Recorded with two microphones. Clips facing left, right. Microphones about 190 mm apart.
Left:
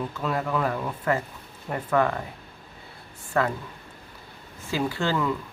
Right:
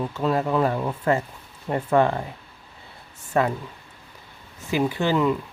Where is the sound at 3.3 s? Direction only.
20° right (ahead or behind).